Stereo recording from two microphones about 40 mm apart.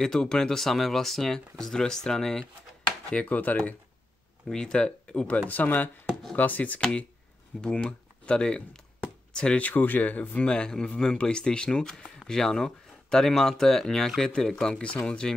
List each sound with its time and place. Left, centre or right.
0.0 s speech: centre
3.3 s speech: left
4.5 s speech: centre
5.5 s speech: left
6.8 s speech: left
9.6 s speech: left
10.3 s speech: left
10.7 s speech: centre